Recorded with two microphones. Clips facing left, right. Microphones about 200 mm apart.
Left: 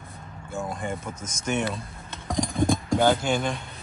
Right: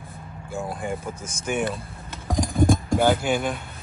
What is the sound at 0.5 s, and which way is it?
Speech, 5° right (ahead or behind).